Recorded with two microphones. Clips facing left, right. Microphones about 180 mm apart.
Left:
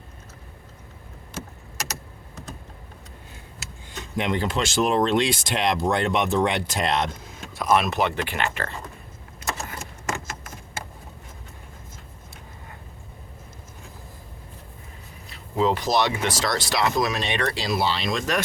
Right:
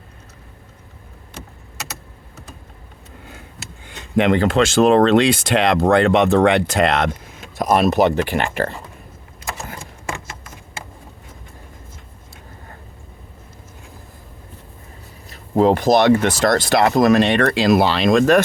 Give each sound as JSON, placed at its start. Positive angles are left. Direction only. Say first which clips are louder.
{"t": 4.2, "sound": "speech", "louder": "right 10 dB", "side_deg": -65}
{"t": 7.5, "sound": "speech", "louder": "right 6 dB", "side_deg": -45}
{"t": 15.3, "sound": "speech", "louder": "right 8 dB", "side_deg": -55}